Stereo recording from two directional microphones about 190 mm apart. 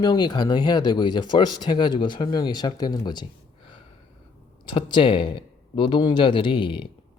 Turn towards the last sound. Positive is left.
turn(degrees=25)  # may be behind; listen again after turning